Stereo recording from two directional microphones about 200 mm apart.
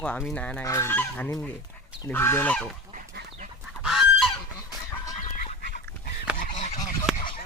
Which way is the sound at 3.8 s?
Centre (ahead or behind).